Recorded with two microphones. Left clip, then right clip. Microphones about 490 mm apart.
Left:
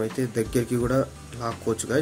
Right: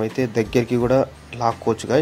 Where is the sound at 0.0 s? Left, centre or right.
Left.